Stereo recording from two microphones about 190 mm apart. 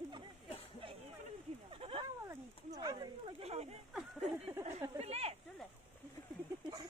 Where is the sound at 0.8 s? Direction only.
30° right (ahead or behind).